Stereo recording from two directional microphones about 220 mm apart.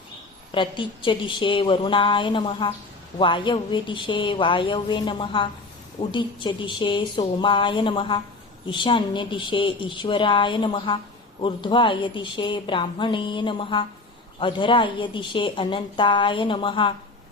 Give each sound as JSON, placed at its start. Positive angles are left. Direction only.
{"t": 0.5, "sound": "a woman's voice", "side_deg": 20}